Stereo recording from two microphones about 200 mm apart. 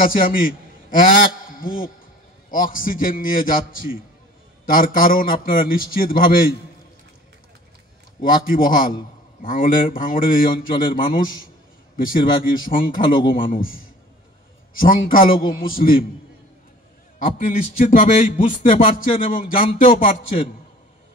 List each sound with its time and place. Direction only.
0.0 s a man's voice: 45° left (ahead or behind)
8.2 s a man's voice: 45° left (ahead or behind)
17.2 s a man's voice: 40° left (ahead or behind)
18.8 s a sound: 25° left (ahead or behind)
19.3 s a man's voice: 45° left (ahead or behind)